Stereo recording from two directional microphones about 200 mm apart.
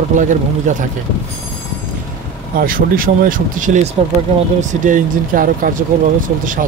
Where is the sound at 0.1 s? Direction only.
40° right (ahead or behind).